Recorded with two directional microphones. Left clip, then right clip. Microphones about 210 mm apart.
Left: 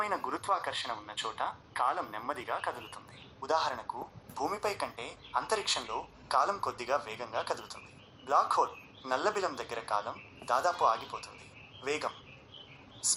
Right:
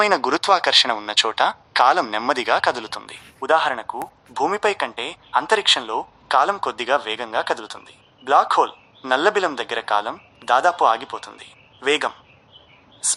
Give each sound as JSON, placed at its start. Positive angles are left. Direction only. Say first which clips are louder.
{"t": 0.0, "sound": "speech", "louder": "right 16 dB", "side_deg": -45}
{"t": 3.4, "sound": "a man's voice", "louder": "right 13 dB", "side_deg": -30}